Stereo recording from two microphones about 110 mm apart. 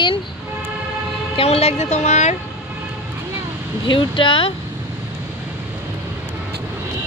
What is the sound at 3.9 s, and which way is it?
Speech, 50° left (ahead or behind).